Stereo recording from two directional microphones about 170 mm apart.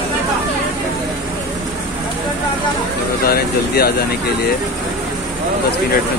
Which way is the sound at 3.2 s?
65° left (ahead or behind).